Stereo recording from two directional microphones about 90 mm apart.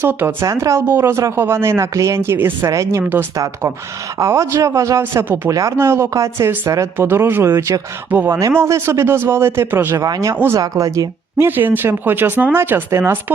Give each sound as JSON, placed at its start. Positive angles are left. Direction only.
{"t": 0.0, "sound": "speech", "side_deg": -20}
{"t": 0.4, "sound": "speech", "side_deg": -35}
{"t": 10.0, "sound": "speech", "side_deg": -40}
{"t": 10.3, "sound": "speech", "side_deg": -25}
{"t": 10.6, "sound": "speech", "side_deg": -40}
{"t": 11.4, "sound": "speech", "side_deg": -20}